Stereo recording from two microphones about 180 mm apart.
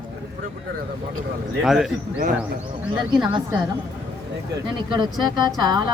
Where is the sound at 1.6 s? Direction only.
Centre (ahead or behind).